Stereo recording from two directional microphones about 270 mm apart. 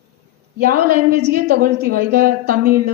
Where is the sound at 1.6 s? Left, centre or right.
Right.